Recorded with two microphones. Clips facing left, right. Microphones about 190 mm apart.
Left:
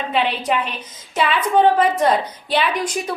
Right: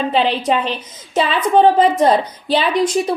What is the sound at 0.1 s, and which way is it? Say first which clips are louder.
A woman's voice: right 1 dB; 30° right (ahead or behind).